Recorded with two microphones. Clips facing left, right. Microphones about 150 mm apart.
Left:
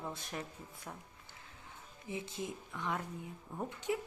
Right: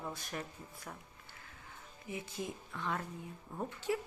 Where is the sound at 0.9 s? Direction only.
5° left (ahead or behind).